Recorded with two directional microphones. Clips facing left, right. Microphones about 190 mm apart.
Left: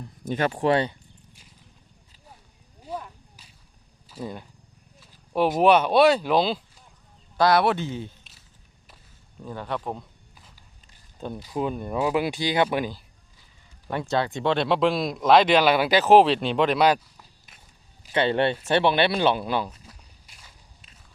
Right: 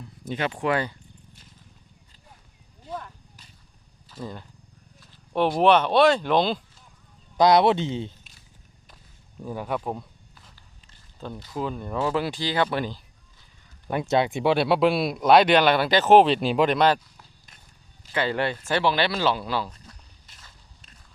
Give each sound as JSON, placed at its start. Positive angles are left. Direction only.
{"t": 0.3, "sound": "speech", "side_deg": 45}
{"t": 2.8, "sound": "wild animals", "side_deg": 10}
{"t": 4.1, "sound": "speech", "side_deg": 10}
{"t": 4.9, "sound": "a sound", "side_deg": 5}
{"t": 5.5, "sound": "speech", "side_deg": 10}
{"t": 7.3, "sound": "speech", "side_deg": -20}
{"t": 9.4, "sound": "speech", "side_deg": -10}
{"t": 11.2, "sound": "speech", "side_deg": 15}
{"t": 14.1, "sound": "speech", "side_deg": -15}
{"t": 18.1, "sound": "speech", "side_deg": 25}
{"t": 19.7, "sound": "walk", "side_deg": 10}